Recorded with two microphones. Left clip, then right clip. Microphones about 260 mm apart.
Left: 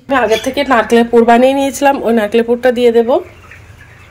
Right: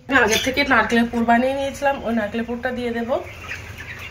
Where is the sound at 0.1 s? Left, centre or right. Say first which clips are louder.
Left 5 dB; left.